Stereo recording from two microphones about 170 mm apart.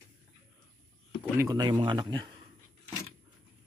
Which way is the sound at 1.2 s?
15° right (ahead or behind).